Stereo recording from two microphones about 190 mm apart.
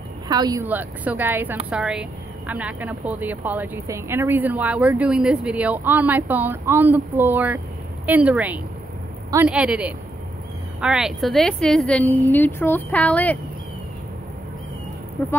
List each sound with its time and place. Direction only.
0.3 s speech: 20° right (ahead or behind)
0.7 s a woman's voice: 10° right (ahead or behind); by 13.4 s 10° left (ahead or behind)
15.2 s a woman's voice: 10° left (ahead or behind)